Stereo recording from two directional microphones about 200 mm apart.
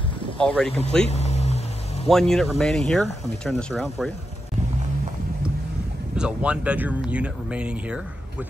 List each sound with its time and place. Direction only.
0.4 s speech: 5° left (ahead or behind)
1.1 s a sound: 35° left (ahead or behind)
2.0 s speech: centre (ahead or behind)
6.1 s speech: 5° right (ahead or behind)